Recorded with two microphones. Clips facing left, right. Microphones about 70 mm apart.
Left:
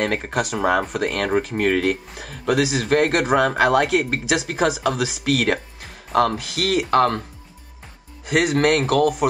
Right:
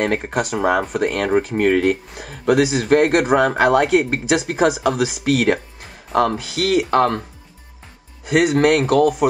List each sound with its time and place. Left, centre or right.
0.0 s speech: centre
6.5 s speech: left
8.5 s speech: centre